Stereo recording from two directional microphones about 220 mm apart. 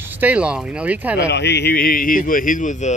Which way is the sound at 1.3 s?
50° left (ahead or behind).